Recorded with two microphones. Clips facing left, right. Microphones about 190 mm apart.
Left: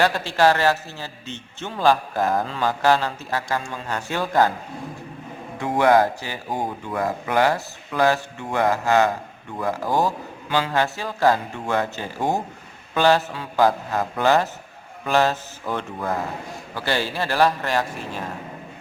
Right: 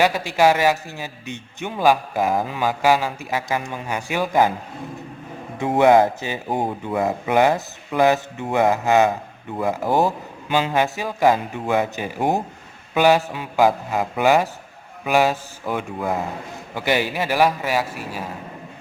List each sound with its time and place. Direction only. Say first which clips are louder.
0.0 s a man's voice: right 1 dB; 10° right (ahead or behind)
5.5 s a man's voice: right 3 dB; 25° right (ahead or behind); by 18.3 s 5° right (ahead or behind)